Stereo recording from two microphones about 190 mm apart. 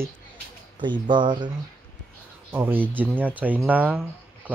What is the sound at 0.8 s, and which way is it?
Speech, 25° right (ahead or behind).